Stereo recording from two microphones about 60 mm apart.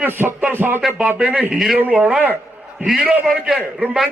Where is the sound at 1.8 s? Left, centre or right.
Right.